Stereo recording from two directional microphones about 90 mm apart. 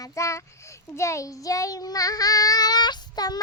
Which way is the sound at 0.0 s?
35° left (ahead or behind).